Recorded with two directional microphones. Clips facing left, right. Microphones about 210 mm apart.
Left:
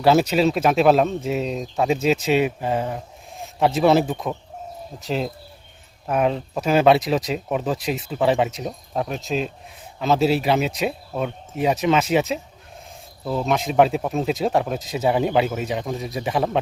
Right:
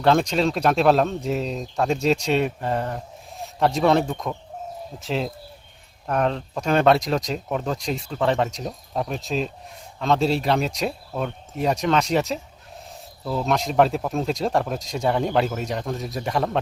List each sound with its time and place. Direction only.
0.0 s speech: 5° left (ahead or behind)